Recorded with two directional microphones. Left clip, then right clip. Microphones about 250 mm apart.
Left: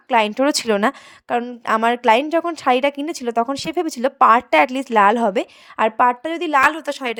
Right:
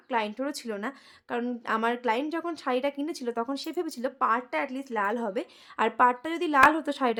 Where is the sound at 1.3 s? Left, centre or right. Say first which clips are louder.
Left 10 dB; left.